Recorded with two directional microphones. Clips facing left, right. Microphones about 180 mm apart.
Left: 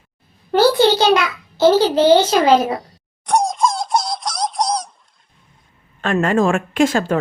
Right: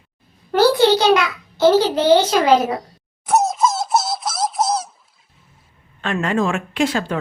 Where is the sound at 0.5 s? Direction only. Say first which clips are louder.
Even; 25° left (ahead or behind).